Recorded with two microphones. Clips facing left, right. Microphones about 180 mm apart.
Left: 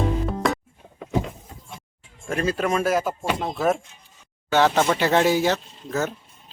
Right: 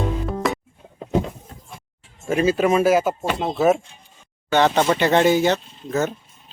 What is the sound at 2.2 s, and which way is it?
Speech, 5° right (ahead or behind).